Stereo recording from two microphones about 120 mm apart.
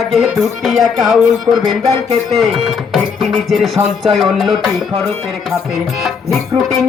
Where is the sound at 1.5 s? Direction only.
30° right (ahead or behind).